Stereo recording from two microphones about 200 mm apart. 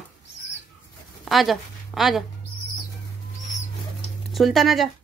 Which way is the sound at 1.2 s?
Centre (ahead or behind).